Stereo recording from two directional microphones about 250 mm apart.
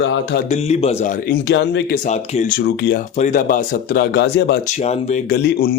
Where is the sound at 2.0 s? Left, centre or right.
Left.